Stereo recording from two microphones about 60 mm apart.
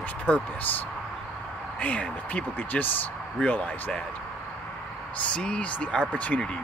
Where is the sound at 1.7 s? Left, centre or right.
Left.